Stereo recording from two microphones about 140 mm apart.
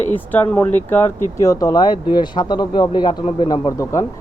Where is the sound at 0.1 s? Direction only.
15° left (ahead or behind).